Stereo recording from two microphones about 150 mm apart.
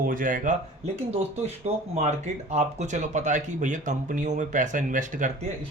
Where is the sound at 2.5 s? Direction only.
50° right (ahead or behind).